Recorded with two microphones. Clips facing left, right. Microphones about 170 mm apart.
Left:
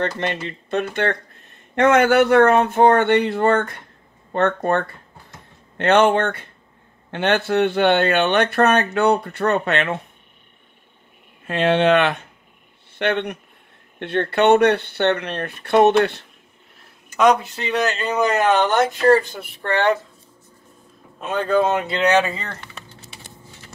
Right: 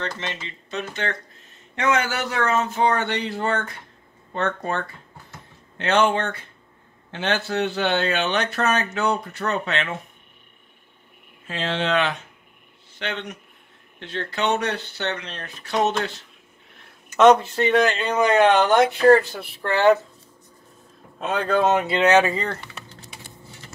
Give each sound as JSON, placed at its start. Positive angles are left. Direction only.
{"t": 0.0, "sound": "a man's voice", "side_deg": 60}
{"t": 11.4, "sound": "a man's voice", "side_deg": 60}
{"t": 17.2, "sound": "speech", "side_deg": 0}
{"t": 21.6, "sound": "speech", "side_deg": 0}